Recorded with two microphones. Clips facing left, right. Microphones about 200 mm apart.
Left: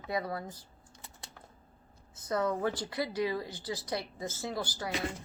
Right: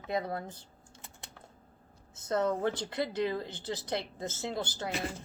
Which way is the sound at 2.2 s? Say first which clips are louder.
Right 1 dB; 25° right (ahead or behind).